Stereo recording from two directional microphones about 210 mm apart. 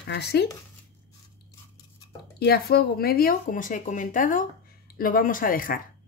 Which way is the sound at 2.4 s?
50° left (ahead or behind).